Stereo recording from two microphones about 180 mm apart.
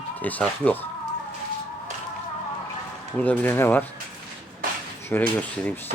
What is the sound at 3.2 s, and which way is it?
Speech, 10° left (ahead or behind).